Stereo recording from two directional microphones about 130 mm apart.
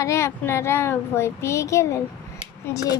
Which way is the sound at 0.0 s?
20° left (ahead or behind).